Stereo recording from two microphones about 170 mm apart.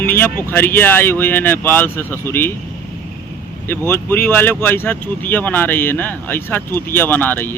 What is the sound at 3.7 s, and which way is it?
Speech, 15° left (ahead or behind).